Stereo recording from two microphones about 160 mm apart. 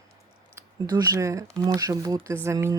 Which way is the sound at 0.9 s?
25° right (ahead or behind).